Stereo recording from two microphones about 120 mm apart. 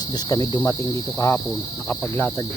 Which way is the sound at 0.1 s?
35° left (ahead or behind).